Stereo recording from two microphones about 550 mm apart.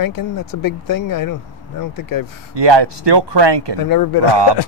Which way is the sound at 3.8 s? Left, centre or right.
Left.